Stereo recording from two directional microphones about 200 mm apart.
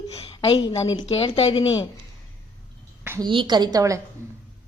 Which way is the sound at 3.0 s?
10° right (ahead or behind).